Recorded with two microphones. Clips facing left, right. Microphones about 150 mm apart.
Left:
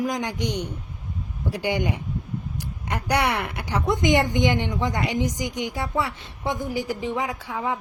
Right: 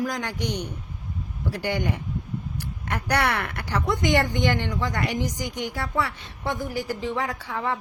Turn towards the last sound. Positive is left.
turn(degrees=10)  # may be behind; listen again after turning